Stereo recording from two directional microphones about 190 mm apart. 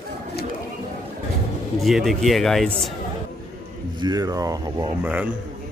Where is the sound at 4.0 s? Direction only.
20° right (ahead or behind).